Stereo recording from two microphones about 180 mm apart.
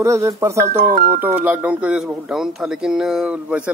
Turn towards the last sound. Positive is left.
turn(degrees=-5)  # may be behind; listen again after turning